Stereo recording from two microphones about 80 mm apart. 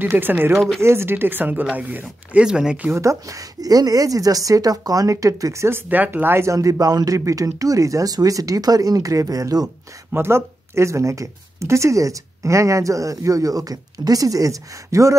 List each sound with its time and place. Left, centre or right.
0.0 s speech: right
2.4 s speech: centre
2.9 s a woman's voice: right
10.1 s a woman's voice: right